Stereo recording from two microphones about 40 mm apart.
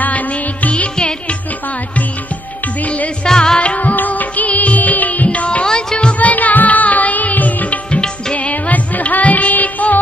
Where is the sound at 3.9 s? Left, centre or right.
Left.